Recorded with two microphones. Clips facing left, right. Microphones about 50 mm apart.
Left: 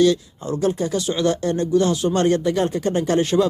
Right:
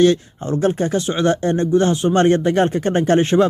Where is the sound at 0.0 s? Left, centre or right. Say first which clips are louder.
Right 3 dB; right.